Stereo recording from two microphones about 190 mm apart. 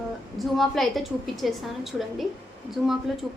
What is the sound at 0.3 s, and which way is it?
A woman's voice, centre (ahead or behind).